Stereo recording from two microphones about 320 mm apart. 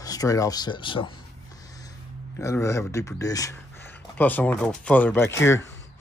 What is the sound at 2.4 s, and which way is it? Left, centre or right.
Speech, centre.